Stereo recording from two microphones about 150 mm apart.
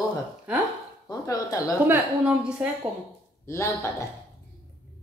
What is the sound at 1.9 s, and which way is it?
Speech, 5° right (ahead or behind).